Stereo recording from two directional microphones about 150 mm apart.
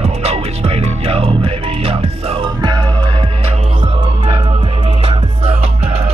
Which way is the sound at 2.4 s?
30° right (ahead or behind).